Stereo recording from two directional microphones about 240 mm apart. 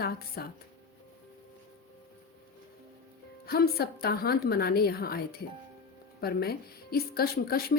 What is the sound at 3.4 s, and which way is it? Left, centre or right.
A woman's voice, left.